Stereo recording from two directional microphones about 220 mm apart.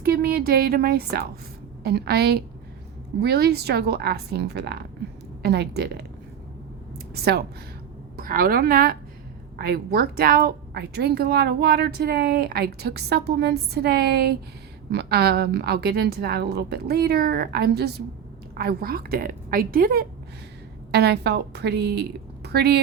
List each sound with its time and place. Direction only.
0.0 s a woman's voice: 45° right (ahead or behind)
7.1 s a woman's voice: 45° right (ahead or behind)